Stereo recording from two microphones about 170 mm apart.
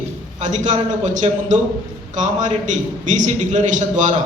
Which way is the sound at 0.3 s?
45° right (ahead or behind).